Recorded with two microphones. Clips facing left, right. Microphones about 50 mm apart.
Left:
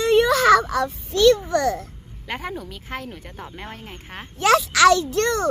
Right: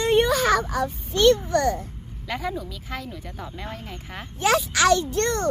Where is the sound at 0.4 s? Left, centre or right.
Left.